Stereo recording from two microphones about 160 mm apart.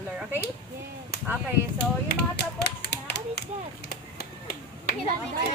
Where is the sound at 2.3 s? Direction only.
90° left; by 5.0 s 70° left (ahead or behind).